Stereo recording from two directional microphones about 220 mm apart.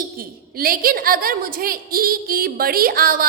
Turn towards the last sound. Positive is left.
turn(degrees=-40)  # may be behind; listen again after turning